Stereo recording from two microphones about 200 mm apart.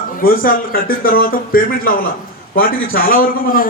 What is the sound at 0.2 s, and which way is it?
Speech, 45° left (ahead or behind).